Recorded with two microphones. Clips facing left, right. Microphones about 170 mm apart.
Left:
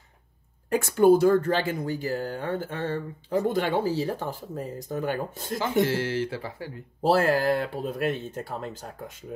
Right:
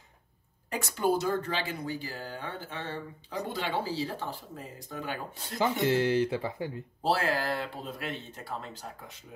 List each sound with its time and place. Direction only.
0.7 s speech: 50° left (ahead or behind)
5.6 s speech: 20° right (ahead or behind)
7.0 s speech: 45° left (ahead or behind)